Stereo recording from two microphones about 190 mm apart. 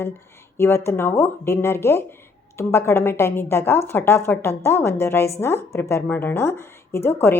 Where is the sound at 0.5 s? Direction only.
15° left (ahead or behind).